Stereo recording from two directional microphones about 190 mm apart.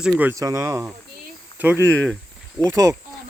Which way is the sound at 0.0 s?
10° right (ahead or behind).